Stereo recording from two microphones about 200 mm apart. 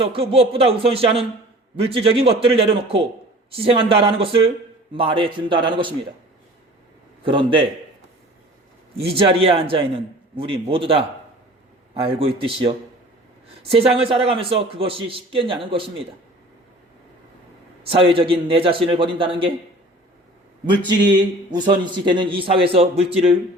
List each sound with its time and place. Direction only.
0.0 s speech: 30° right (ahead or behind)
7.3 s speech: 25° right (ahead or behind)
9.0 s speech: 25° right (ahead or behind)
17.8 s speech: 25° right (ahead or behind)
20.7 s speech: 20° right (ahead or behind)